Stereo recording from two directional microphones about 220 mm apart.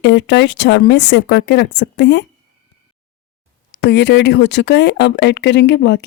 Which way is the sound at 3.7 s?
50° left (ahead or behind).